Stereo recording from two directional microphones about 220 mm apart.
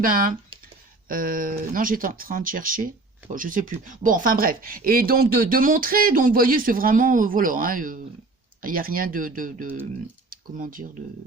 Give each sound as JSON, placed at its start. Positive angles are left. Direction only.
{"t": 0.0, "sound": "speech", "side_deg": -40}